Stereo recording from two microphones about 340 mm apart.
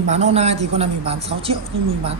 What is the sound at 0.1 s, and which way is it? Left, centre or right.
Speech, centre.